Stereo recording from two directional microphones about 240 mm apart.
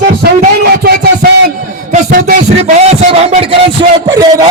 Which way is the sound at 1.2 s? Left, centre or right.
Right.